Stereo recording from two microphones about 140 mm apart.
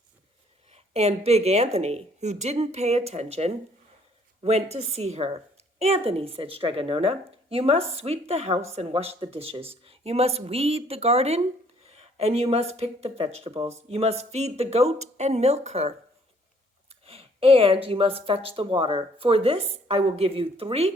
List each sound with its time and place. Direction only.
0.7 s speech: 50° right (ahead or behind)
17.1 s speech: 45° right (ahead or behind)